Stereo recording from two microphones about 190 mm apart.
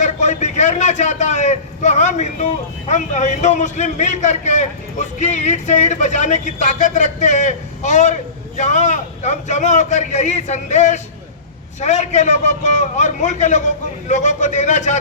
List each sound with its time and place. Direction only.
0.0 s a man's voice: 40° left (ahead or behind)